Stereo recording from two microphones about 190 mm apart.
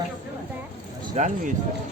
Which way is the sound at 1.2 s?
40° right (ahead or behind).